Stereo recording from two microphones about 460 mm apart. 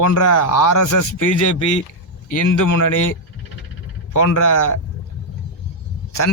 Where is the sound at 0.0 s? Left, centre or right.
Left.